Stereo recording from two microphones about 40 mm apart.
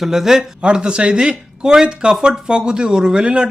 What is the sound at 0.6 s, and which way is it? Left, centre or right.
Speech, right.